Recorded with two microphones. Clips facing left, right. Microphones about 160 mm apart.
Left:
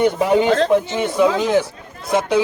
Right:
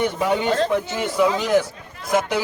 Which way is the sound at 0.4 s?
80° left.